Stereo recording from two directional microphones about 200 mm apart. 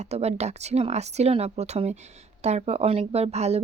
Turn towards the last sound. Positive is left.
turn(degrees=-30)  # may be behind; listen again after turning